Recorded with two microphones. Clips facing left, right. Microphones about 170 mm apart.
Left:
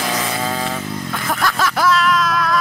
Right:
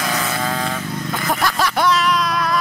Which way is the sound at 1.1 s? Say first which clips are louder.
Right 1 dB; centre (ahead or behind).